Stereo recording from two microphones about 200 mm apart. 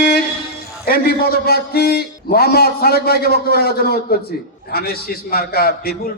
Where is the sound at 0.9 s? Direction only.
45° left (ahead or behind).